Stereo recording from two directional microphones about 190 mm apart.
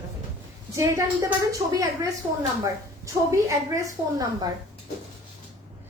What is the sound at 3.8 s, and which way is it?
Speech, 20° right (ahead or behind).